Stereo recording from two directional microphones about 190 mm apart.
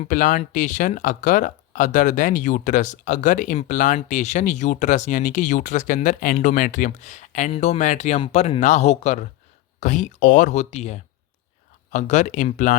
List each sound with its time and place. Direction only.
0.0 s speech: 45° left (ahead or behind)